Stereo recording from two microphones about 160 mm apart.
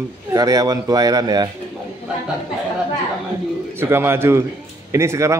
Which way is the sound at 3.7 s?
15° right (ahead or behind).